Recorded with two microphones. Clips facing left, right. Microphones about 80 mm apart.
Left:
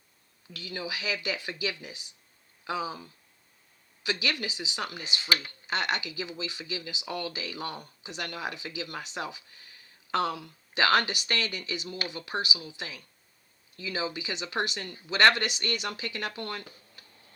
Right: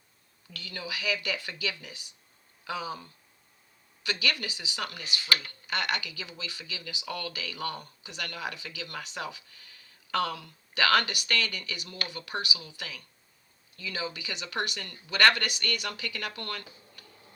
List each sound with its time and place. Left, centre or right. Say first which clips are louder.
0.5 s speech: left 2 dB; centre